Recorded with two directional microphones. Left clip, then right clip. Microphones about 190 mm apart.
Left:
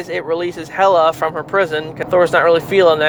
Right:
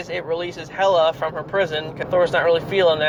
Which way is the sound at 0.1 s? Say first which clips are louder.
Left 6 dB; 40° left (ahead or behind).